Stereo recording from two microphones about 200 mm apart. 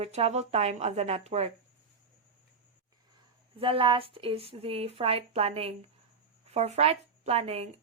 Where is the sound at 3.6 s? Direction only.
25° right (ahead or behind).